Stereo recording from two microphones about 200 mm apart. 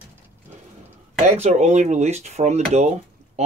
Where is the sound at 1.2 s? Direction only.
35° right (ahead or behind).